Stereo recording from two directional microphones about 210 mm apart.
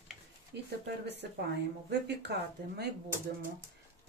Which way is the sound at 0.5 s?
55° right (ahead or behind).